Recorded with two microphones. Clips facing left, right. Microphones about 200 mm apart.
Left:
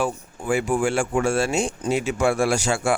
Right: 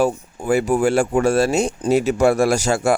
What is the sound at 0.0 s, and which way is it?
Speech, 40° right (ahead or behind).